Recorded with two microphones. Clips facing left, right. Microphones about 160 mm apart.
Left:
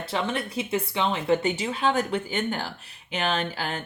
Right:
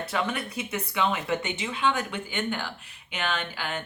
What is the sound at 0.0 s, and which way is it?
Speech, 30° left (ahead or behind).